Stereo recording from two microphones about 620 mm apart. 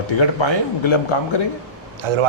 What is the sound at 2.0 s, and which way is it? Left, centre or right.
Speech, right.